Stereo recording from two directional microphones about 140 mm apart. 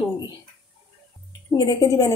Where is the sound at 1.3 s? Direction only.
25° left (ahead or behind).